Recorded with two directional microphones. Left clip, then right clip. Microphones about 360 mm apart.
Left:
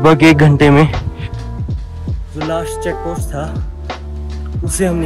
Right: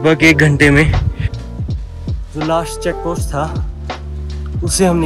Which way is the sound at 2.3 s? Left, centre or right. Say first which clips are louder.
Right 2 dB; centre.